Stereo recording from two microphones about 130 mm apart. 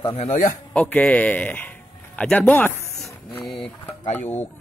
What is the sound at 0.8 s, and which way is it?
Speech, 10° left (ahead or behind).